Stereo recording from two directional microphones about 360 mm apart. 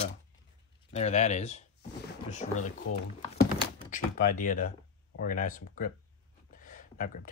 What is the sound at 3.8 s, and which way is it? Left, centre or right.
Speech, left.